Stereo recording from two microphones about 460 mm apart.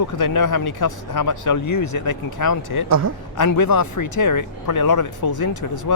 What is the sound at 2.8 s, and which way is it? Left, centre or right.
Speech, right.